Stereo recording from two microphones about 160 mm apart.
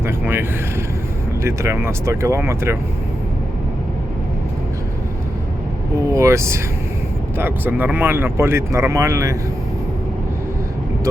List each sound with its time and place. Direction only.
0.0 s vehicle: 15° right (ahead or behind)
1.5 s speech: 15° right (ahead or behind)
6.1 s speech: 20° right (ahead or behind)